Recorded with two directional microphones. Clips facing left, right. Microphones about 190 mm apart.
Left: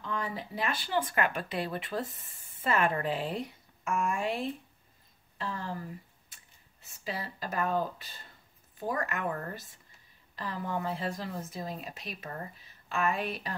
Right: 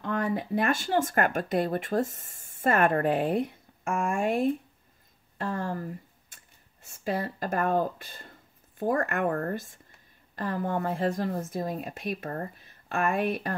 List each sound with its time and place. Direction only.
0.0 s a woman's voice: 55° right (ahead or behind)
6.9 s a woman's voice: 50° right (ahead or behind)